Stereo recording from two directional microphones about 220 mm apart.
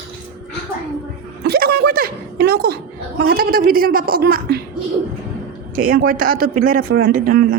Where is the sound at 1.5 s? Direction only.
45° right (ahead or behind).